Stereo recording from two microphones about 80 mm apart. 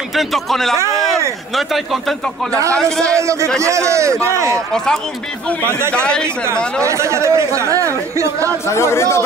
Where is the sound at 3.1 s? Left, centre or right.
Right.